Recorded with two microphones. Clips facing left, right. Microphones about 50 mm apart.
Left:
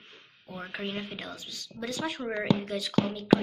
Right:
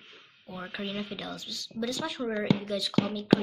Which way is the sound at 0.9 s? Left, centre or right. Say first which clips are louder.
Right 1 dB; left.